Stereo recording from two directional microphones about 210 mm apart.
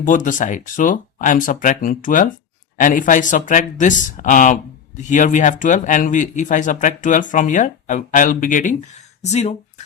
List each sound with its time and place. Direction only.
0.0 s speech: 40° left (ahead or behind)